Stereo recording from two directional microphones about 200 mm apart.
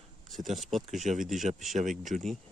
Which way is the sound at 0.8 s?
35° right (ahead or behind).